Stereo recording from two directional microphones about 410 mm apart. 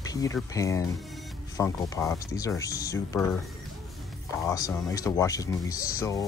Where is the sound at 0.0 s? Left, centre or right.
Centre.